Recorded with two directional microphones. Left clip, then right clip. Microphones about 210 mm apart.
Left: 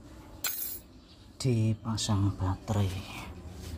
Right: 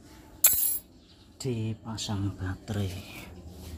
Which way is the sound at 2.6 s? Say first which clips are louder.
Left 2 dB; 5° right (ahead or behind).